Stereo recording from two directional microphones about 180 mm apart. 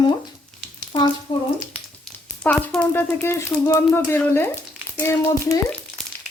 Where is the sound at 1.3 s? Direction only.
25° left (ahead or behind).